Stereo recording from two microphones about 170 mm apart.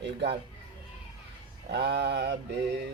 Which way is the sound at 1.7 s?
75° right (ahead or behind).